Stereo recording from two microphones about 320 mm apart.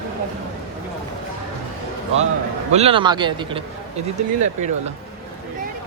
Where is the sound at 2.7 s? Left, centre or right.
Centre.